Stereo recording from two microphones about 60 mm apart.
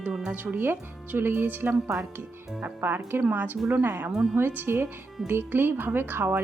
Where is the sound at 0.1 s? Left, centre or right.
Centre.